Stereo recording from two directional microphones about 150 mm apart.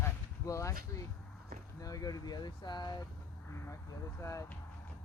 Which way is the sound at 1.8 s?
25° left (ahead or behind).